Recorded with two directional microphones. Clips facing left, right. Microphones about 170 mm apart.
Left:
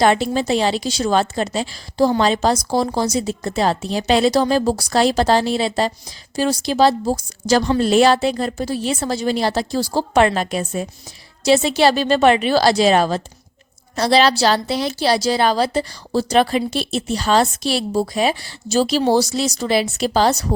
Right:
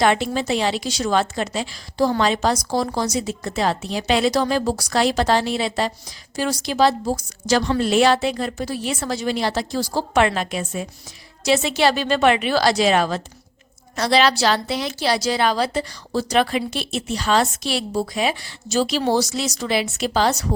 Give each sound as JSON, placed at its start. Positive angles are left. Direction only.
{"t": 0.0, "sound": "a woman's voice", "side_deg": 35}